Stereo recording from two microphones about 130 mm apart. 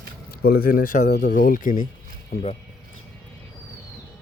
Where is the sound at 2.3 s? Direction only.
70° left (ahead or behind).